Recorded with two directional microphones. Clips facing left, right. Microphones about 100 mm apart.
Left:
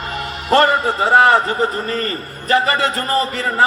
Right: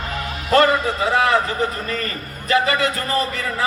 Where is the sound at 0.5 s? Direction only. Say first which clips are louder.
Left 2 dB; 40° left (ahead or behind).